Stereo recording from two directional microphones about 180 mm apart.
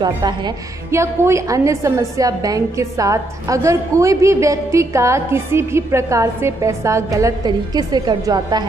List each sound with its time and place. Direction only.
0.0 s a woman's voice: 25° right (ahead or behind)